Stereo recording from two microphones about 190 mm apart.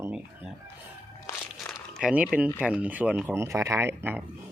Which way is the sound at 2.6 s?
5° right (ahead or behind).